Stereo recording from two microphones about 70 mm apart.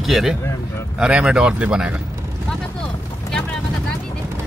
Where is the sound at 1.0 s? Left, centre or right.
Centre.